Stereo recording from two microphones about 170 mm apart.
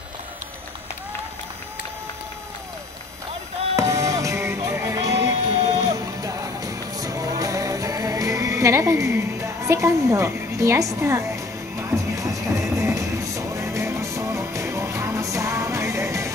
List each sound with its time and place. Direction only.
3.7 s music: 20° right (ahead or behind)